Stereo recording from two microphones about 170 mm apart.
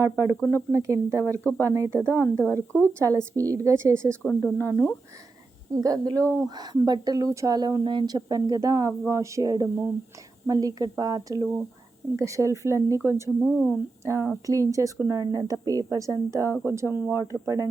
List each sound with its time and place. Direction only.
0.0 s a woman's voice: 15° right (ahead or behind)
2.4 s speech: 10° left (ahead or behind)
3.0 s a woman's voice: 20° right (ahead or behind)
4.2 s speech: 10° left (ahead or behind)
4.6 s a woman's voice: 15° right (ahead or behind)
13.4 s speech: centre (ahead or behind)
14.0 s a woman's voice: 15° right (ahead or behind)